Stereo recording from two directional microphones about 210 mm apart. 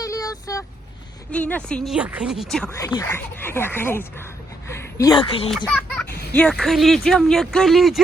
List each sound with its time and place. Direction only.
0.0 s vehicle: 15° left (ahead or behind)
1.3 s speech: 5° left (ahead or behind)
2.6 s speech: 15° left (ahead or behind)
5.6 s a child's voice: 5° left (ahead or behind)